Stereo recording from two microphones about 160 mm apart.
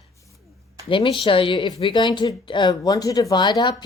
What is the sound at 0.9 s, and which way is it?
Speech, 35° left (ahead or behind).